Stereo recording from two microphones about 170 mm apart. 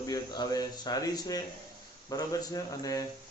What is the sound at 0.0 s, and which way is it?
A man's voice, 20° left (ahead or behind).